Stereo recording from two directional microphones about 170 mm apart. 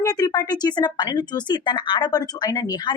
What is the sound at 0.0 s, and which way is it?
Speech, 20° left (ahead or behind).